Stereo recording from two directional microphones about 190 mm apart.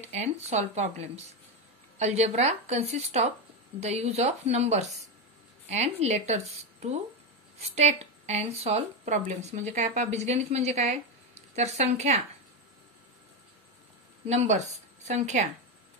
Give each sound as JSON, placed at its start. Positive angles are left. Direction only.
{"t": 0.0, "sound": "speech", "side_deg": -35}
{"t": 14.2, "sound": "speech", "side_deg": -35}